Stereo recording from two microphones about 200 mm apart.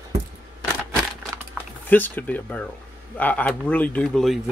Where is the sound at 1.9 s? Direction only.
10° left (ahead or behind).